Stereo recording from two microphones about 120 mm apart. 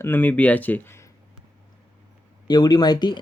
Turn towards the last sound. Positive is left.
turn(degrees=35)  # may be behind; listen again after turning